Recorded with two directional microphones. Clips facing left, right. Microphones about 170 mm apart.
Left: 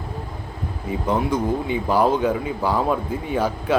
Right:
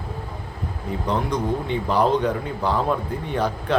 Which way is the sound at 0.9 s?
5° left (ahead or behind).